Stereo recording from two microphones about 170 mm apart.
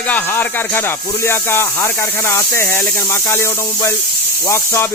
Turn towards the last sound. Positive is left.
turn(degrees=15)  # may be behind; listen again after turning